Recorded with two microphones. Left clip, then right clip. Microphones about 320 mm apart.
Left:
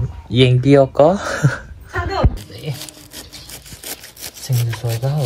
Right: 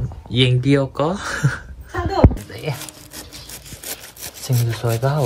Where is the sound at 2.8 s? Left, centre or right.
Centre.